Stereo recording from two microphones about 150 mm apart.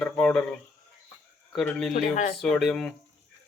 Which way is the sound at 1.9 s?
60° left (ahead or behind).